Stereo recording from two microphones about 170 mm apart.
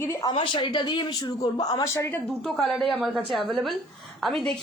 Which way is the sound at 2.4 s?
Centre (ahead or behind).